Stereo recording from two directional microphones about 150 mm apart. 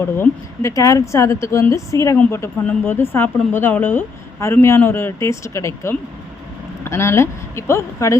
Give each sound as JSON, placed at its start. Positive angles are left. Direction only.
{"t": 0.2, "sound": "a woman's voice", "side_deg": 20}